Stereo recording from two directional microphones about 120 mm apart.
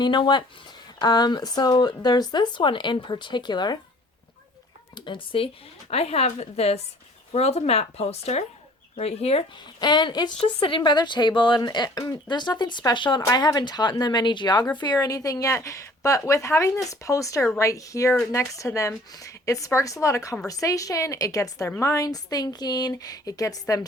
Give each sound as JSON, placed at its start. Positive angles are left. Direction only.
{"t": 0.0, "sound": "speech", "side_deg": 40}
{"t": 4.9, "sound": "speech", "side_deg": 45}
{"t": 5.9, "sound": "speech", "side_deg": 60}
{"t": 9.8, "sound": "a woman's voice", "side_deg": 40}